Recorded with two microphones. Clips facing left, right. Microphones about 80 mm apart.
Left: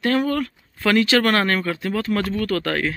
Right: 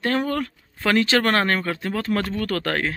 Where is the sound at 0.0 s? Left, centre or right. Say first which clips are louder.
Left 3 dB; right.